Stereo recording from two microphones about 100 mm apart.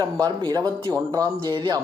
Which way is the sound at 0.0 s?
40° right (ahead or behind).